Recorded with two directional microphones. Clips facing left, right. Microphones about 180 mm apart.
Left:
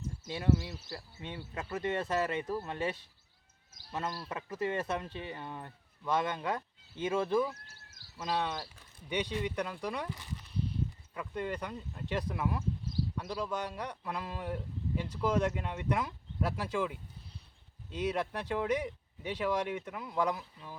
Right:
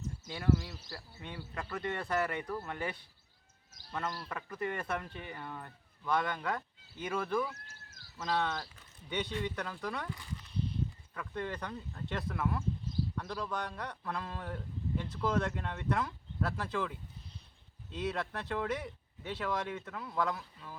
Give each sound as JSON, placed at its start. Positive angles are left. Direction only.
{"t": 0.3, "sound": "speech", "side_deg": 20}